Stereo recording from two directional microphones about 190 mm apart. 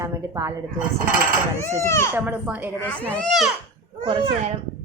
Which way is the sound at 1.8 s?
15° left (ahead or behind).